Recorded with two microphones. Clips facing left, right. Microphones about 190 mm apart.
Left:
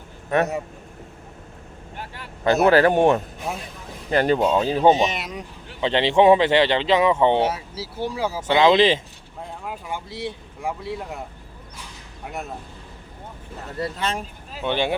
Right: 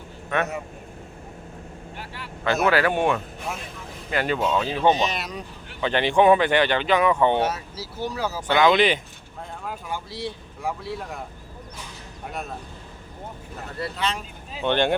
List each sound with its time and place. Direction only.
0.3 s speech: 35° left (ahead or behind)
2.0 s vehicle: 45° left (ahead or behind)
2.6 s speech: 40° left (ahead or behind)
4.1 s speech: 40° left (ahead or behind)
4.8 s speech: 25° left (ahead or behind)
12.3 s speech: 20° left (ahead or behind)
13.7 s speech: 45° left (ahead or behind)
14.5 s speech: 5° left (ahead or behind)